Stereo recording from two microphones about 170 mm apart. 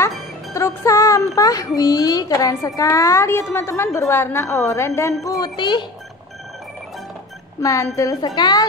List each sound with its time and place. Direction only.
0.6 s music: 20° left (ahead or behind)
1.8 s a woman's voice: 20° left (ahead or behind)
7.6 s a woman's voice: 20° left (ahead or behind)